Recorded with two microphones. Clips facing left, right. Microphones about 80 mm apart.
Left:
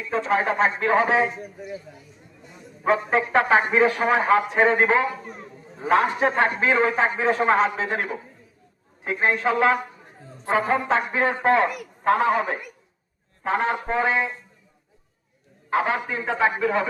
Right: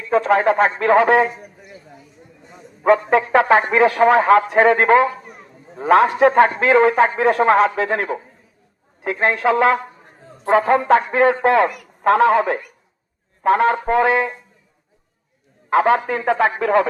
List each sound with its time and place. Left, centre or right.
0.1 s a man's voice: right
1.4 s a man's voice: centre
2.8 s a man's voice: right
5.2 s a man's voice: centre
5.7 s a man's voice: right
13.8 s a sound: right
15.7 s a man's voice: right